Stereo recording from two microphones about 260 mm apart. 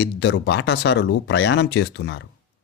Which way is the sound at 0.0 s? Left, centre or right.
Left.